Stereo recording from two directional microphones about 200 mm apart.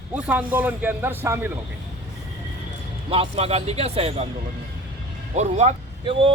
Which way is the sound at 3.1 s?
30° right (ahead or behind).